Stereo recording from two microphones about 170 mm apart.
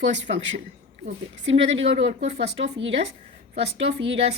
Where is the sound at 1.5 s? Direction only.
35° right (ahead or behind).